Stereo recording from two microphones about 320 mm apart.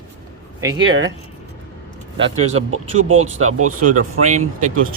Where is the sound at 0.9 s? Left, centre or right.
Right.